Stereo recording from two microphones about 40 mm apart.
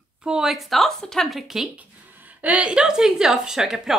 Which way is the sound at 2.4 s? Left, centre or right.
Right.